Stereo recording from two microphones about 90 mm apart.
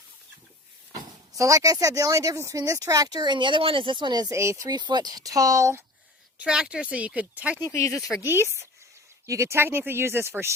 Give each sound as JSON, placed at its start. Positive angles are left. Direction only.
{"t": 1.4, "sound": "speech", "side_deg": -40}
{"t": 4.3, "sound": "speech", "side_deg": -35}
{"t": 4.8, "sound": "speech", "side_deg": -55}
{"t": 6.4, "sound": "speech", "side_deg": -10}
{"t": 7.7, "sound": "speech", "side_deg": 35}
{"t": 7.9, "sound": "speech", "side_deg": -5}
{"t": 8.2, "sound": "speech", "side_deg": -25}